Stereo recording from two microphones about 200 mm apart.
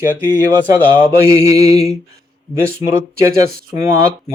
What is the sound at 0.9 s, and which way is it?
Speech, 15° right (ahead or behind).